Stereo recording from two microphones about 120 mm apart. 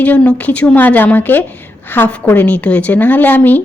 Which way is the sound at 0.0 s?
10° left (ahead or behind).